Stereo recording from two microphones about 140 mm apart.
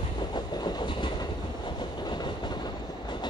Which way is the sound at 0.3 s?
30° left (ahead or behind).